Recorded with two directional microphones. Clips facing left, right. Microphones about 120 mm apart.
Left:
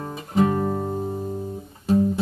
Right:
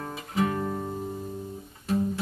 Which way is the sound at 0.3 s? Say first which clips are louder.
Left 7 dB; 35° left (ahead or behind).